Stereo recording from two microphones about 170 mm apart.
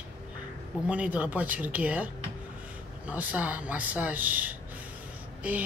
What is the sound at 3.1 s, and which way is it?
A man's voice, 10° right (ahead or behind).